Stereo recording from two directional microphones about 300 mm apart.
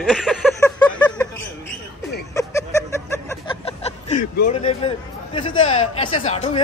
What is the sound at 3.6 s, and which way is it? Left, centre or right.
Speech, left.